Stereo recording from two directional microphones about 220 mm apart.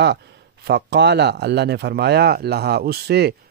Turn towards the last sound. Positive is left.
turn(degrees=-50)  # may be behind; listen again after turning